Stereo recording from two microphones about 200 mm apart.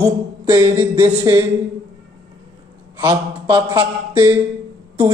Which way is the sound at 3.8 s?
15° right (ahead or behind).